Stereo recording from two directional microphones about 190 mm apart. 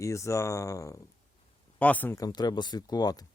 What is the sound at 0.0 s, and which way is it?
Speech, 15° left (ahead or behind).